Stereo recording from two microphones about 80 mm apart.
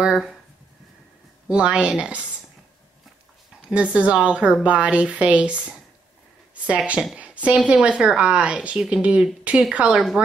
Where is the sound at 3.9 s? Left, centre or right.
Centre.